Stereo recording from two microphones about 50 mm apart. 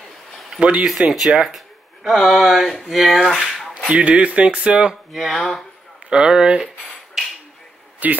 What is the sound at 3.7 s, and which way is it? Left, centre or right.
Speech, right.